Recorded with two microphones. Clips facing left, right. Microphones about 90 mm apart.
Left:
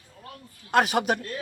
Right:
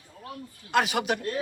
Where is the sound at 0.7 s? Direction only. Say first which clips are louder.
Left 3 dB; 40° left (ahead or behind).